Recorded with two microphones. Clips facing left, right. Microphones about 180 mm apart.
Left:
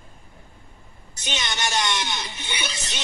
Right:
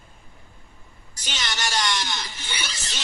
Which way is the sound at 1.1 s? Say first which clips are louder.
Left 2 dB; 20° left (ahead or behind).